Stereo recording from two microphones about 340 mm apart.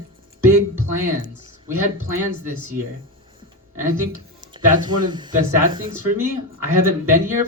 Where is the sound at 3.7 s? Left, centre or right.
Centre.